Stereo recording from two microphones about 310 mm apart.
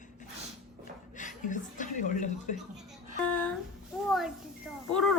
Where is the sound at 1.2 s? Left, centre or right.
Left.